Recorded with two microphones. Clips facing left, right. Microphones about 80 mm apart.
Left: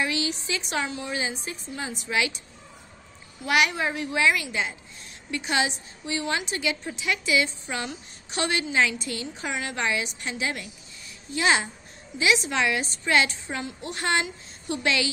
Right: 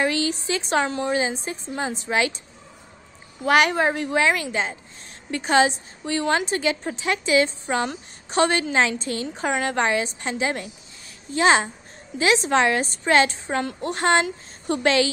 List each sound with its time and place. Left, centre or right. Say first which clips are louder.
0.0 s a woman's voice: right 5 dB; right
3.4 s a woman's voice: right 5 dB; right
13.6 s a woman's voice: right 8 dB; right